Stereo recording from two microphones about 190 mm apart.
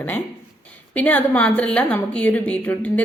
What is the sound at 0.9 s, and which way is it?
A woman's voice, 10° left (ahead or behind).